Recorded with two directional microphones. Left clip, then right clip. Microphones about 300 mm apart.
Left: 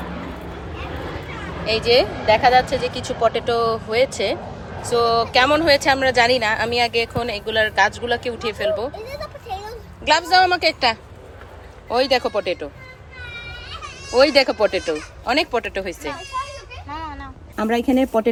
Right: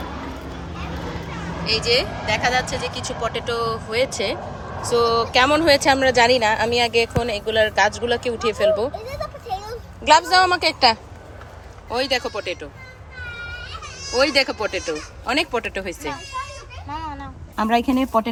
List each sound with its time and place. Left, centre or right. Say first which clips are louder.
1.6 s a woman's voice: left 3 dB; centre
10.1 s a woman's voice: right 1 dB; centre
14.2 s a woman's voice: left 4 dB; centre
16.9 s a sound: right 1 dB; centre
17.6 s speech: even; centre